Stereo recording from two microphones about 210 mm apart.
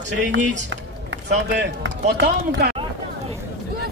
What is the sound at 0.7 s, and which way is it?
Chop, 60° right (ahead or behind).